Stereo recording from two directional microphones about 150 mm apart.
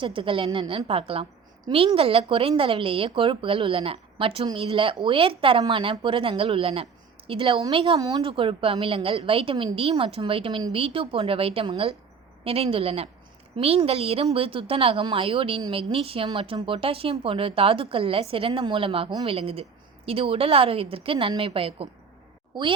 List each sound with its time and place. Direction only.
0.0 s a woman's voice: 35° right (ahead or behind)